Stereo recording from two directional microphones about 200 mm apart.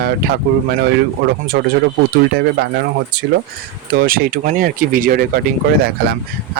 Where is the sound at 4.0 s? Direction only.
45° right (ahead or behind).